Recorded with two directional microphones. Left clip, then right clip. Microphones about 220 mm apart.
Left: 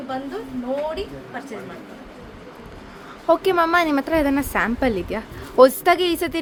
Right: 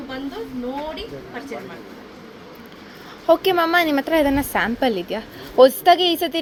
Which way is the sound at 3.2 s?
10° left (ahead or behind).